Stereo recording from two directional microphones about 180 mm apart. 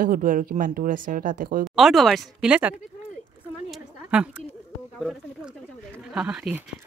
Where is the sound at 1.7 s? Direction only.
Centre (ahead or behind).